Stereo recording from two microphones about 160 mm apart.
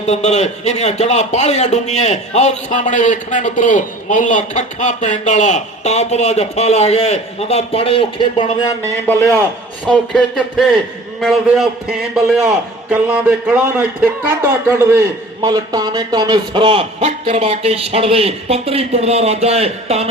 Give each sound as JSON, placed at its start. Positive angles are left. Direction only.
{"t": 0.1, "sound": "a man's voice", "side_deg": 45}
{"t": 9.0, "sound": "a man's voice", "side_deg": 15}